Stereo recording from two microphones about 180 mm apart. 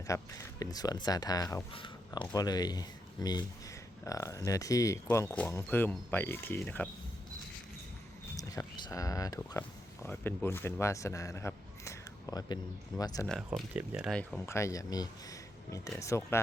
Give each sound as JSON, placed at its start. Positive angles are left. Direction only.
{"t": 0.1, "sound": "speech", "side_deg": 20}
{"t": 8.4, "sound": "speech", "side_deg": 20}
{"t": 13.2, "sound": "speech", "side_deg": 5}
{"t": 14.4, "sound": "speech", "side_deg": 15}